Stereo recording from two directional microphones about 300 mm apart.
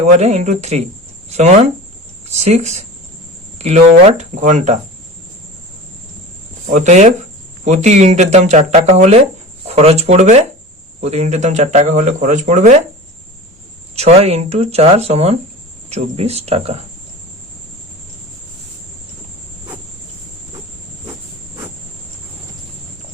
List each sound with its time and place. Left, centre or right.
0.2 s speech: right
4.2 s speech: right
6.7 s speech: right
13.9 s speech: right